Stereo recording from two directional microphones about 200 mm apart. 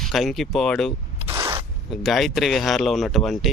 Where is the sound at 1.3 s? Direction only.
20° right (ahead or behind).